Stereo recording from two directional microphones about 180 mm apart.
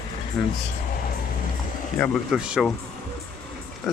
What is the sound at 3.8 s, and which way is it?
Speech, centre (ahead or behind).